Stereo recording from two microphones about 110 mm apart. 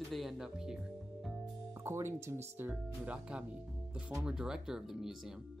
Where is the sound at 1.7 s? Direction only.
25° right (ahead or behind).